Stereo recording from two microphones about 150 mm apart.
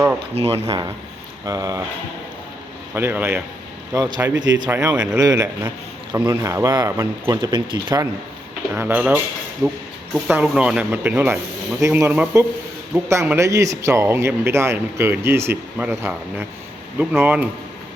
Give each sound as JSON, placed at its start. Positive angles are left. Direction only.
{"t": 0.3, "sound": "speech", "side_deg": -45}
{"t": 0.7, "sound": "a man's voice", "side_deg": -25}
{"t": 2.9, "sound": "speech", "side_deg": -15}
{"t": 3.9, "sound": "a man's voice", "side_deg": -25}
{"t": 8.7, "sound": "speech", "side_deg": -15}
{"t": 10.3, "sound": "speech", "side_deg": -5}